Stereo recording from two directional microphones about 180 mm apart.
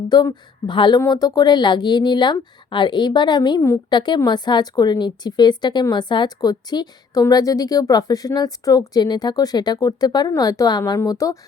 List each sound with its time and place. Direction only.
0.1 s speech: 25° left (ahead or behind)